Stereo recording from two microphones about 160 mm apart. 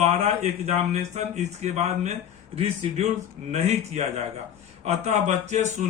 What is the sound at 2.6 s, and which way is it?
Speech, 45° right (ahead or behind).